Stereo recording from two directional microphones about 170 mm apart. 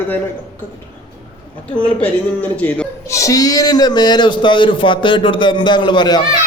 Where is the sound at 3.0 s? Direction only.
20° left (ahead or behind).